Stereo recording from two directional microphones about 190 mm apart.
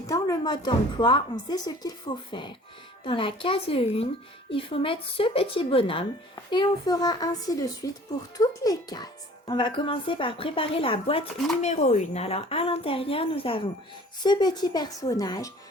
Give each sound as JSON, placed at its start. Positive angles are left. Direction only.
{"t": 0.1, "sound": "speech", "side_deg": 20}